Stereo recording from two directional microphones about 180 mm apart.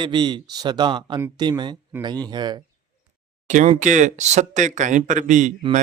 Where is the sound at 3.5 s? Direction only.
45° right (ahead or behind).